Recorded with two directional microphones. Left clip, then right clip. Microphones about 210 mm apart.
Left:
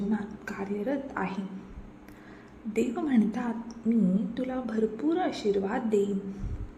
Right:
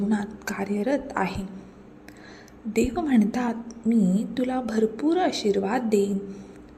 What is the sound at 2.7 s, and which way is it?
A woman's voice, 20° right (ahead or behind).